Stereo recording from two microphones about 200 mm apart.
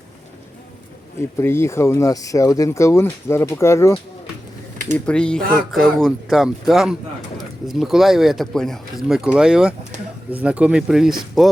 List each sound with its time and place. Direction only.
1.4 s speech: 10° left (ahead or behind); by 9.7 s 5° right (ahead or behind)
9.9 s a sound: 35° right (ahead or behind)
10.3 s speech: 5° right (ahead or behind)